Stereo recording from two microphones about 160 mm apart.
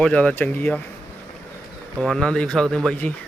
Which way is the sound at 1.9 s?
Centre (ahead or behind).